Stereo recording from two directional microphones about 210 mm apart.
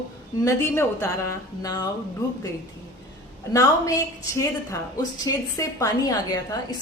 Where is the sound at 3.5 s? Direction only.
15° left (ahead or behind).